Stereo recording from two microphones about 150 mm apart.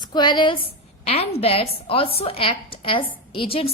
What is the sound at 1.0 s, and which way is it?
A woman's voice, 45° left (ahead or behind).